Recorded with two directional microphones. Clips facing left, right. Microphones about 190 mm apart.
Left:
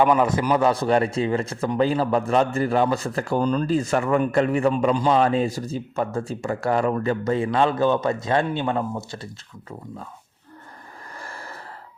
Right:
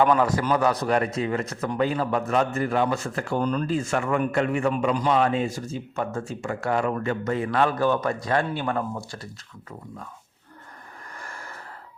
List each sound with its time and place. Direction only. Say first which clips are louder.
0.0 s a man's voice: left 2 dB; 15° left (ahead or behind)
11.2 s gasp: left 3 dB; 35° left (ahead or behind)